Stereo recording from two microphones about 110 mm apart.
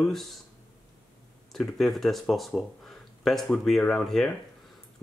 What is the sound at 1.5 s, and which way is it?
Speech, centre (ahead or behind).